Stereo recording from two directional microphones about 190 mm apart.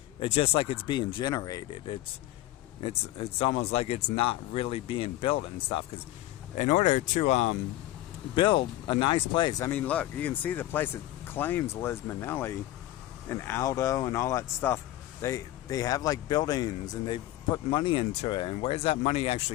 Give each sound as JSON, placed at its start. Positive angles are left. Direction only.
{"t": 0.2, "sound": "speech", "side_deg": 30}
{"t": 8.4, "sound": "speech", "side_deg": 25}
{"t": 9.7, "sound": "speech", "side_deg": 10}